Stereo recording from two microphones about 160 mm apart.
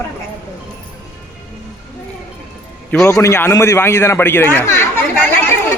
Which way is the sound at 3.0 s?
20° left (ahead or behind).